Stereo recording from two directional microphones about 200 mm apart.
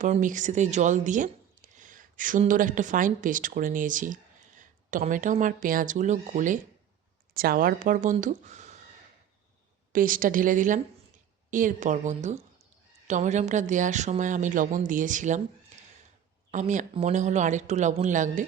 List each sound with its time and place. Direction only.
0.0 s a woman's voice: 40° right (ahead or behind)
9.9 s a woman's voice: 45° right (ahead or behind)
16.5 s speech: 35° right (ahead or behind)